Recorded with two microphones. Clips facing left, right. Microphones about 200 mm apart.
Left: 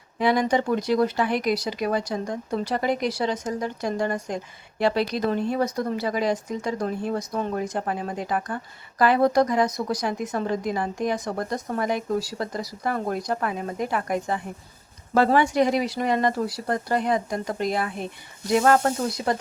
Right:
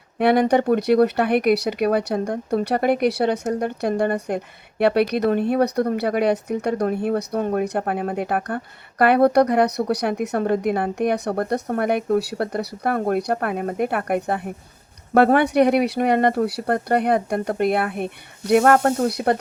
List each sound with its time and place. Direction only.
0.2 s speech: 60° right (ahead or behind)